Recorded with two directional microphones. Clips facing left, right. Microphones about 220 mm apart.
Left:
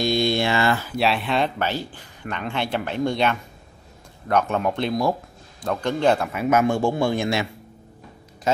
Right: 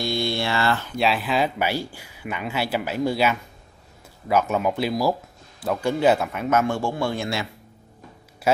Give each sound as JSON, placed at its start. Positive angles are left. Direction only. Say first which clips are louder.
{"t": 0.0, "sound": "speech", "louder": "left 4 dB", "side_deg": 20}
{"t": 6.4, "sound": "a man's voice", "louder": "left 5 dB", "side_deg": 15}